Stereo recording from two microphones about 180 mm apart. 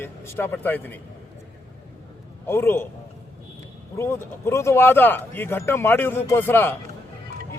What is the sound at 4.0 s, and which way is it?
A man's voice, 15° left (ahead or behind).